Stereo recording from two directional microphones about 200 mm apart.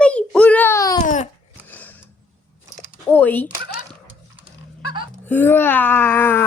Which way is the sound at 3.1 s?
10° left (ahead or behind).